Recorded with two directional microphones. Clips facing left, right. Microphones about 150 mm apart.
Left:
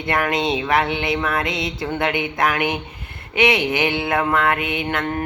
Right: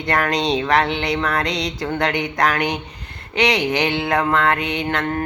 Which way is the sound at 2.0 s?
5° left (ahead or behind).